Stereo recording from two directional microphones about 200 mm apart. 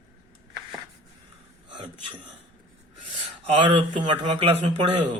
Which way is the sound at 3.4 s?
25° right (ahead or behind).